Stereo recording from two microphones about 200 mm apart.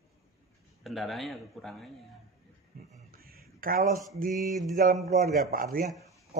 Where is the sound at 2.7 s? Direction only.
45° right (ahead or behind).